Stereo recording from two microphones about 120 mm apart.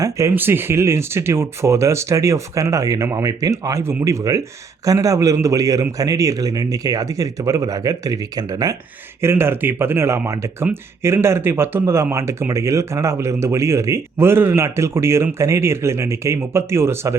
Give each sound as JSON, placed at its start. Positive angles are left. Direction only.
{"t": 0.0, "sound": "speech", "side_deg": -25}
{"t": 9.2, "sound": "speech", "side_deg": -20}